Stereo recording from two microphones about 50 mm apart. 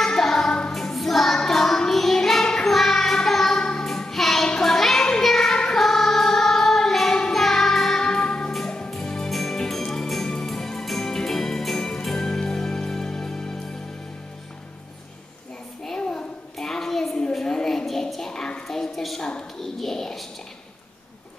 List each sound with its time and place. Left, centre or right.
0.0 s music: centre
0.6 s child singing: centre
4.5 s music: centre
15.8 s child singing: centre
16.5 s a sound: centre